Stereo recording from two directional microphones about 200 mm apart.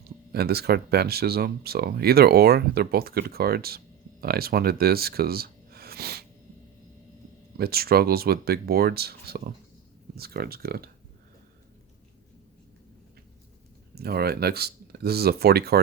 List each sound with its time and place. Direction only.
0.3 s speech: 50° right (ahead or behind)
7.6 s speech: 50° right (ahead or behind)
13.9 s speech: 50° right (ahead or behind)